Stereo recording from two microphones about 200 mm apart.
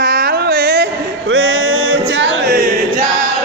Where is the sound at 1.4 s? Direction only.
90° right; by 2.6 s 65° right (ahead or behind).